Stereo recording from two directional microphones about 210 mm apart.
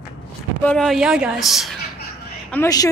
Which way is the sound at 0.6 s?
5° left (ahead or behind).